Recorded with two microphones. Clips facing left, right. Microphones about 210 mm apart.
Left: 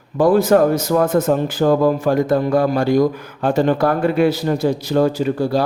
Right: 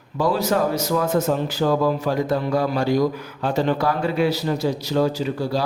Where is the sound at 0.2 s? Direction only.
50° left (ahead or behind).